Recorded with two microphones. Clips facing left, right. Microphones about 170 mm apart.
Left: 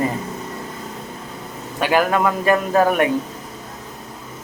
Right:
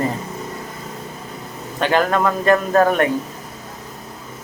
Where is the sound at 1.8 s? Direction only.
10° left (ahead or behind).